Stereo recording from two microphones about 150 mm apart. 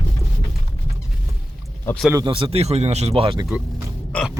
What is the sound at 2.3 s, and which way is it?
Speech, 40° right (ahead or behind).